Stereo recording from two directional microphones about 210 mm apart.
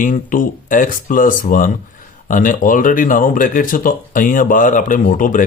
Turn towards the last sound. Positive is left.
turn(degrees=40)  # may be behind; listen again after turning